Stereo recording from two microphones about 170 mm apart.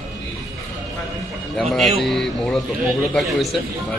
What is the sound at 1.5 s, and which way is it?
Speech, centre (ahead or behind).